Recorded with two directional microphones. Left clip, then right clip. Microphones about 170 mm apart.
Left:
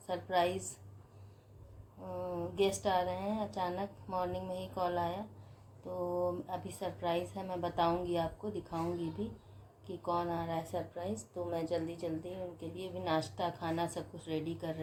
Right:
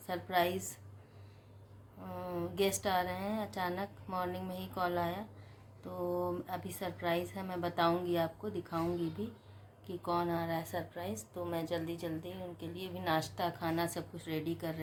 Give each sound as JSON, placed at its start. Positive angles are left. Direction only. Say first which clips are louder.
{"t": 0.1, "sound": "a woman's voice", "louder": "even", "side_deg": 0}
{"t": 2.1, "sound": "a woman's voice", "louder": "left 1 dB", "side_deg": -5}
{"t": 6.1, "sound": "speech", "louder": "left 1 dB", "side_deg": -20}
{"t": 6.5, "sound": "a woman's voice", "louder": "even", "side_deg": 0}